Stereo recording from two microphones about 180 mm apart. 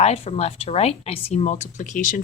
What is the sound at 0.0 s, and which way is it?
Speech, 35° left (ahead or behind).